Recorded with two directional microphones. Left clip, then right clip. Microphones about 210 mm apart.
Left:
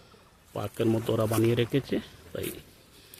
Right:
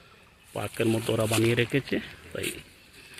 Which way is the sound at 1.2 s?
15° right (ahead or behind).